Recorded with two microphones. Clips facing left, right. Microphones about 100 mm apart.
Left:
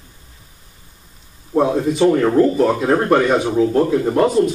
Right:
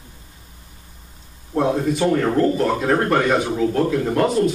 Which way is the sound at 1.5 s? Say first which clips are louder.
Left 3 dB; 5° left (ahead or behind).